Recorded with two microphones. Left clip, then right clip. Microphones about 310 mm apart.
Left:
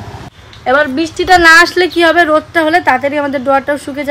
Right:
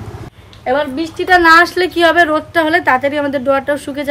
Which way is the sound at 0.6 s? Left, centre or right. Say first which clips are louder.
Left 5 dB; left.